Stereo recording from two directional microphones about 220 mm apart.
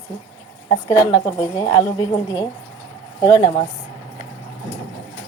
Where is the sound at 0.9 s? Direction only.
20° left (ahead or behind).